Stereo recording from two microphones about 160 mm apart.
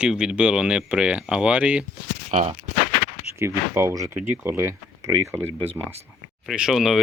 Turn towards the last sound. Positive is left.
turn(degrees=0)  # may be behind; listen again after turning